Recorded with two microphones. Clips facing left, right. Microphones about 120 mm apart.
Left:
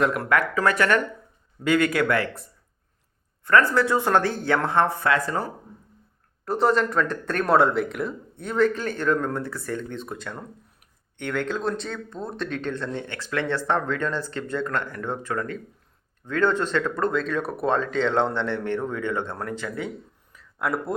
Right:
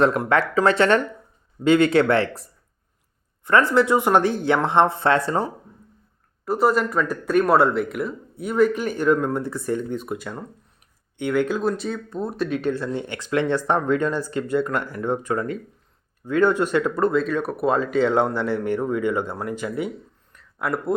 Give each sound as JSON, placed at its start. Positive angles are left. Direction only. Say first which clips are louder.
{"t": 0.2, "sound": "speech", "louder": "right 3 dB", "side_deg": -25}
{"t": 3.4, "sound": "speech", "louder": "right 2 dB", "side_deg": -20}
{"t": 6.4, "sound": "speech", "louder": "right 2 dB", "side_deg": -5}
{"t": 20.3, "sound": "a sound", "louder": "right 1 dB", "side_deg": 0}